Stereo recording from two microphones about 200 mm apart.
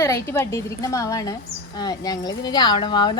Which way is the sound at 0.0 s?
15° left (ahead or behind).